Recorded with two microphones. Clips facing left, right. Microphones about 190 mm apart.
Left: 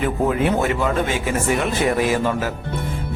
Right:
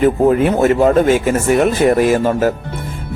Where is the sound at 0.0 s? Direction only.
45° right (ahead or behind).